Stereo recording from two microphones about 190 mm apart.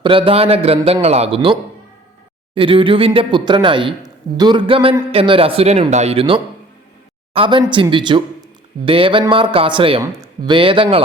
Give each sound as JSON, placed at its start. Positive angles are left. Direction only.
{"t": 0.0, "sound": "a man's voice", "side_deg": -30}
{"t": 2.6, "sound": "a man's voice", "side_deg": -30}